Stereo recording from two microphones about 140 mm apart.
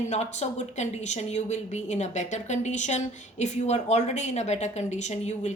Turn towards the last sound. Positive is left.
turn(degrees=55)  # may be behind; listen again after turning